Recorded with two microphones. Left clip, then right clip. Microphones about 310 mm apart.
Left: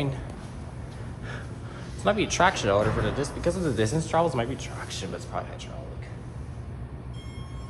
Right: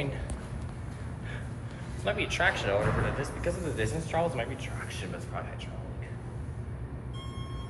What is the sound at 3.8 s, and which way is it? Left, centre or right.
Speech, left.